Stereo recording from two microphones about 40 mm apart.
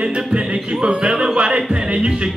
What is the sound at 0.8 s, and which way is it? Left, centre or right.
Speech, right.